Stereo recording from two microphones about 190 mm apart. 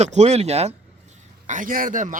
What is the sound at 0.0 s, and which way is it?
A man's voice, 35° right (ahead or behind).